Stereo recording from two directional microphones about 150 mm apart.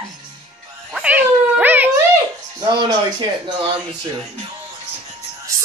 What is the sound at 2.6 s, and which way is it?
Speech, 30° right (ahead or behind).